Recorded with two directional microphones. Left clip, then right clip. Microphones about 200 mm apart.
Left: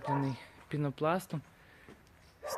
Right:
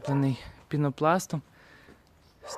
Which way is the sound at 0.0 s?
50° right (ahead or behind).